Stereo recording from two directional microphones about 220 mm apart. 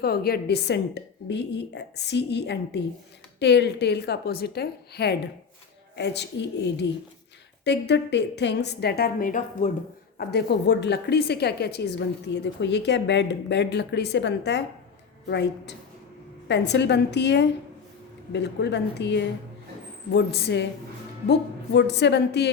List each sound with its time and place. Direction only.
0.0 s a woman's voice: 45° left (ahead or behind)
6.7 s a woman's voice: 50° left (ahead or behind); by 9.7 s 35° left (ahead or behind)
10.2 s a woman's voice: 50° left (ahead or behind)